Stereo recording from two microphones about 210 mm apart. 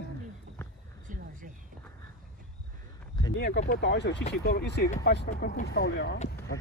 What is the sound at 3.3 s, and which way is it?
Speech, 50° left (ahead or behind).